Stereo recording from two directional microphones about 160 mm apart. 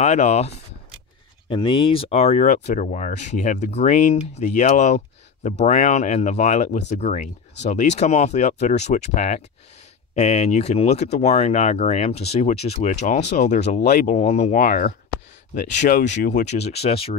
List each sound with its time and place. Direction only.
0.0 s speech: 45° left (ahead or behind)
1.5 s speech: 30° left (ahead or behind)
13.6 s speech: 90° left
14.1 s speech: 45° left (ahead or behind)